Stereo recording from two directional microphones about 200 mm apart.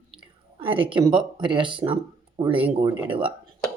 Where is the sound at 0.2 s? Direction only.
25° right (ahead or behind).